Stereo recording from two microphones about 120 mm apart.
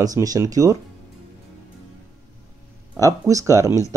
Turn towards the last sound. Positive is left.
turn(degrees=-25)  # may be behind; listen again after turning